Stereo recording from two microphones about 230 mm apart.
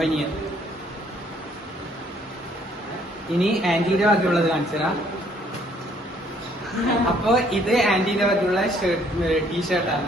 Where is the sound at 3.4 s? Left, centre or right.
Centre.